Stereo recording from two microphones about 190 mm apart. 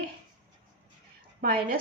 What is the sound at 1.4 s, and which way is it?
Speech, 50° right (ahead or behind).